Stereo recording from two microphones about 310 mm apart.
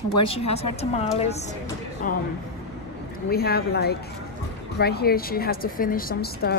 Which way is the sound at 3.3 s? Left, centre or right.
Left.